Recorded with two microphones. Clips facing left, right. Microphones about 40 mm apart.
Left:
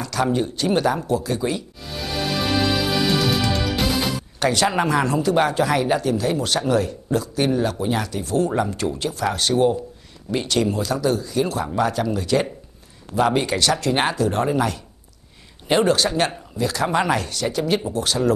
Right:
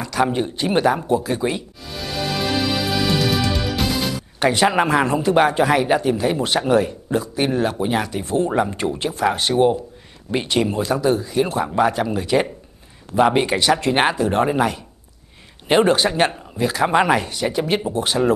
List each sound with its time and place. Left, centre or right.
0.0 s speech: centre
3.2 s music: centre
4.4 s speech: right